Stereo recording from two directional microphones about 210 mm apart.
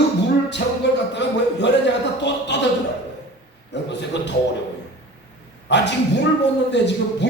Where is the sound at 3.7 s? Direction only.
55° left (ahead or behind).